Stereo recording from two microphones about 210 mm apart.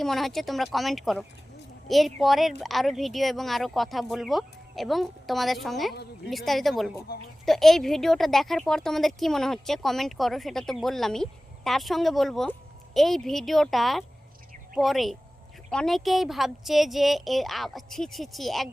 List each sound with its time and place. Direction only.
0.0 s speech: centre (ahead or behind)